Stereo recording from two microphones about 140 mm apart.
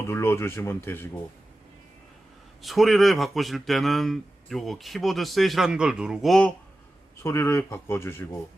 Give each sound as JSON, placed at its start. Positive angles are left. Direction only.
{"t": 0.0, "sound": "speech", "side_deg": 20}
{"t": 2.6, "sound": "speech", "side_deg": 0}
{"t": 7.2, "sound": "speech", "side_deg": 20}